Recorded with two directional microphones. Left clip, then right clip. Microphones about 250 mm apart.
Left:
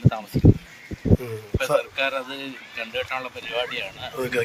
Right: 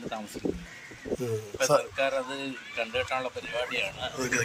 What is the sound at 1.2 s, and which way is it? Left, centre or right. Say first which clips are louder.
A man's voice: left 1 dB; centre.